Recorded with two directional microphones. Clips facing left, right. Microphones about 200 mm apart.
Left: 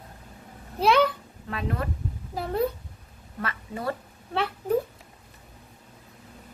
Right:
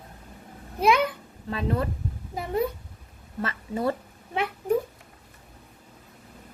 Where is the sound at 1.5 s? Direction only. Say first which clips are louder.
Right 3 dB; 30° right (ahead or behind).